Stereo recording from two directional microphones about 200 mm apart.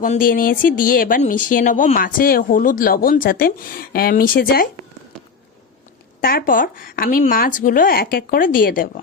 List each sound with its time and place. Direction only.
0.0 s speech: 45° left (ahead or behind)
6.2 s speech: 45° left (ahead or behind)